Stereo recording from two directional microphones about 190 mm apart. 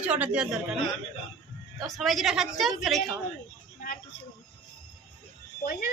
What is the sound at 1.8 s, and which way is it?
A woman's voice, centre (ahead or behind).